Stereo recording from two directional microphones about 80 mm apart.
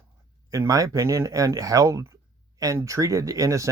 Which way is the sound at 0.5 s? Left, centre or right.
Right.